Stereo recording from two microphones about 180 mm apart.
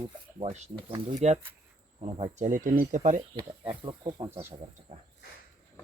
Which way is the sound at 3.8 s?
25° right (ahead or behind).